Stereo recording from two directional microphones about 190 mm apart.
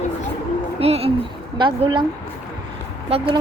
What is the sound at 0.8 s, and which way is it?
A woman's voice, 30° right (ahead or behind).